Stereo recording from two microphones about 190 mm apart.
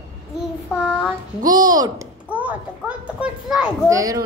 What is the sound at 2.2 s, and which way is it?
A child's voice, 10° right (ahead or behind).